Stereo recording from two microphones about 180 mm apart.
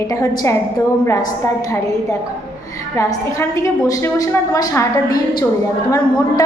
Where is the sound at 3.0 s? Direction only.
15° left (ahead or behind).